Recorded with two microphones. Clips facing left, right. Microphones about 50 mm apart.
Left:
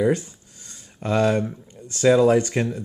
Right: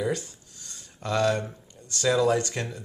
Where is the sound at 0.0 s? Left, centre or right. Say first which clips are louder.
Left 8 dB; left.